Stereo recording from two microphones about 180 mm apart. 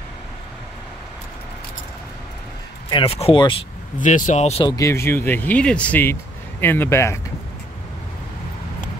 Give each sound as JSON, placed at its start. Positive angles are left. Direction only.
{"t": 2.9, "sound": "speech", "side_deg": 30}
{"t": 4.0, "sound": "speech", "side_deg": 45}
{"t": 4.6, "sound": "speech", "side_deg": 15}